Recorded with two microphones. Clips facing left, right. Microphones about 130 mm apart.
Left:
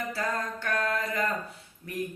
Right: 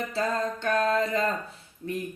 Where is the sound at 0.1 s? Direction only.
25° right (ahead or behind).